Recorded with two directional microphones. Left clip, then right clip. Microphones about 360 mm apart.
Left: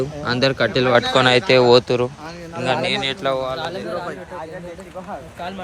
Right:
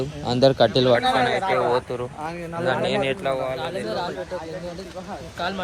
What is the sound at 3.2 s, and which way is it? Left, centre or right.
Speech, centre.